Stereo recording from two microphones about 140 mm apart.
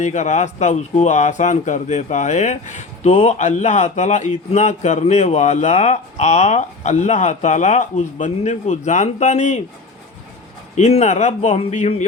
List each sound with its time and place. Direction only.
0.0 s speech: 55° left (ahead or behind)
10.8 s speech: 50° left (ahead or behind)